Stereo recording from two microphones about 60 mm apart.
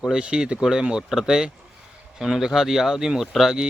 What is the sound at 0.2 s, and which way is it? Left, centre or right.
Speech, centre.